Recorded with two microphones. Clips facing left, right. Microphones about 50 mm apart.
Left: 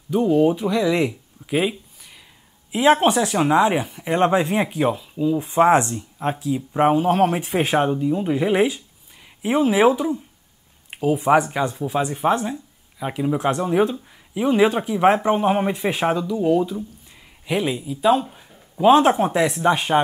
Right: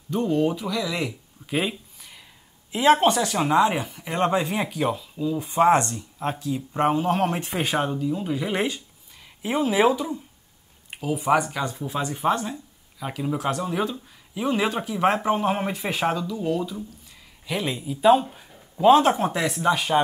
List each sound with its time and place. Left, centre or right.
0.1 s speech: centre
0.6 s speech: left
1.5 s a sound: centre
2.7 s speech: centre
8.5 s speech: centre
10.9 s a sound: centre
11.6 s speech: centre
15.1 s speech: centre
17.6 s speech: centre
18.8 s speech: centre
19.7 s speech: left